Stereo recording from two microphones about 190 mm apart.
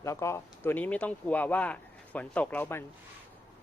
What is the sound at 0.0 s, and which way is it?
Speech, 15° left (ahead or behind).